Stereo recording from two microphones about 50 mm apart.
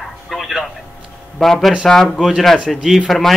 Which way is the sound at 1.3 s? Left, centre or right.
Centre.